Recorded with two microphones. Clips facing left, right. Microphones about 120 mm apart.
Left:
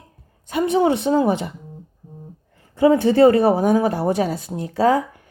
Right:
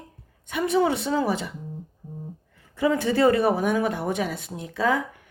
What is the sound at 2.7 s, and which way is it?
Speech, 30° left (ahead or behind).